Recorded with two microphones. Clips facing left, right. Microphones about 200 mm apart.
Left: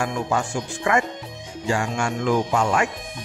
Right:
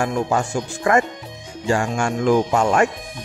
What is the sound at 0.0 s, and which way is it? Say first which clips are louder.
Speech: right 3 dB; 40° right (ahead or behind).